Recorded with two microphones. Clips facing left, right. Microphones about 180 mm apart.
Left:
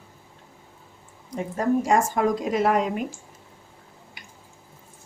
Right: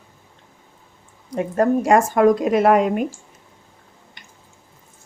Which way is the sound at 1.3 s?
65° right (ahead or behind).